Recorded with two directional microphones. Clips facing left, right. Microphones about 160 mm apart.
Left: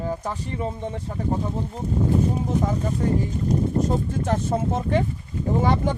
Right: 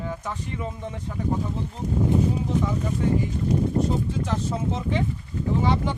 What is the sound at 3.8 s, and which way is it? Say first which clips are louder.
Speech: left 2 dB; 50° left (ahead or behind).